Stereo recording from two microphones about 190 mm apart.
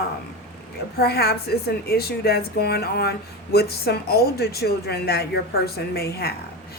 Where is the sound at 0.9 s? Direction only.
55° left (ahead or behind).